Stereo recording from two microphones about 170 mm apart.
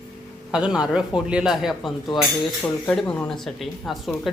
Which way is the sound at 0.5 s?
5° right (ahead or behind).